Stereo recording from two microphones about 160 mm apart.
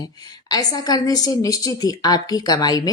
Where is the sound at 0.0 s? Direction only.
25° left (ahead or behind).